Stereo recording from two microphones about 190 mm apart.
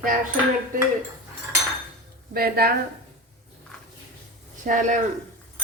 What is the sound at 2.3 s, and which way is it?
Speech, 55° right (ahead or behind).